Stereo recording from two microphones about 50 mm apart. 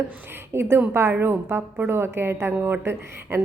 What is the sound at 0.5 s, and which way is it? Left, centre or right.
A woman's voice, right.